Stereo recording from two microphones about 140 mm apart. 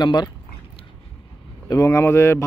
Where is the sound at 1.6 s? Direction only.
20° left (ahead or behind).